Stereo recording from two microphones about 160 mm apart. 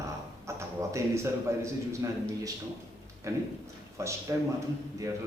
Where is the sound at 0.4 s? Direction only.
20° right (ahead or behind).